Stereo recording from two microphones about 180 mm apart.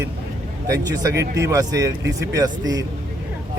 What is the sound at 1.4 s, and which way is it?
Speech, 15° right (ahead or behind).